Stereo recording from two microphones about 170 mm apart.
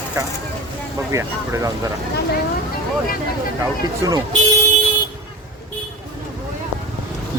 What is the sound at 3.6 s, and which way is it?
Speech, 20° right (ahead or behind).